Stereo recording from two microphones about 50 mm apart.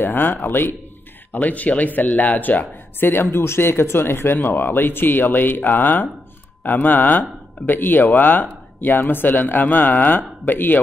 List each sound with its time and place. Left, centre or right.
0.0 s speech: left
1.3 s speech: left